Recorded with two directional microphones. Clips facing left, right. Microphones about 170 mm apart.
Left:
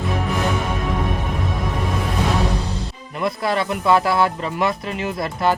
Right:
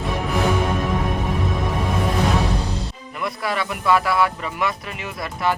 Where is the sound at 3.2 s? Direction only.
30° left (ahead or behind).